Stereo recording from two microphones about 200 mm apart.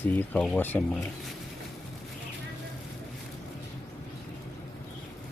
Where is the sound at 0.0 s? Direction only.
10° left (ahead or behind).